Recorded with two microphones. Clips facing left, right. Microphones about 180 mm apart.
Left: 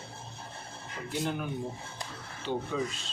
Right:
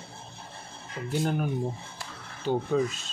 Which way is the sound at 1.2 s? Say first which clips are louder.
Right 5 dB; 45° right (ahead or behind).